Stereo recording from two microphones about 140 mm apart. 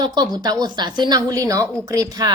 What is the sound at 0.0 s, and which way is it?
A woman's voice, 30° right (ahead or behind).